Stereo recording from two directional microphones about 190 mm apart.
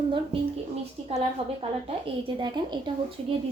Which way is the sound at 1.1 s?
30° right (ahead or behind).